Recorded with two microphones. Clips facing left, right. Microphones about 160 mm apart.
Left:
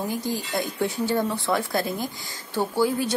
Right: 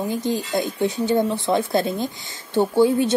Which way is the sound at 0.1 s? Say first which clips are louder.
Right 5 dB; 20° right (ahead or behind).